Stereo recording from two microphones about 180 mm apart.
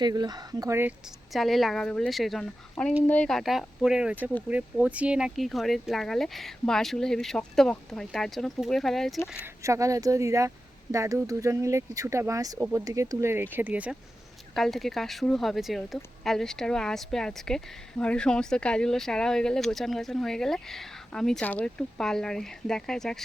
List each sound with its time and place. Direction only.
0.0 s speech: 25° right (ahead or behind)
1.3 s a woman's voice: centre (ahead or behind)
9.6 s speech: 15° right (ahead or behind)
12.5 s speech: 5° right (ahead or behind)
12.8 s a woman's voice: 20° right (ahead or behind); by 23.2 s 5° left (ahead or behind)